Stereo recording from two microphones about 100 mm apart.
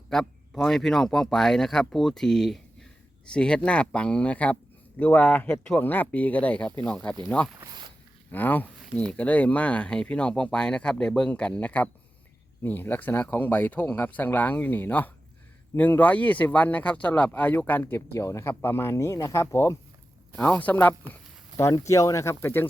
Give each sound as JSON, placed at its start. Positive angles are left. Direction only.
{"t": 0.1, "sound": "speech", "side_deg": 5}
{"t": 7.6, "sound": "zipper", "side_deg": -45}
{"t": 8.3, "sound": "speech", "side_deg": 20}
{"t": 20.4, "sound": "speech", "side_deg": 15}
{"t": 21.6, "sound": "speech", "side_deg": 30}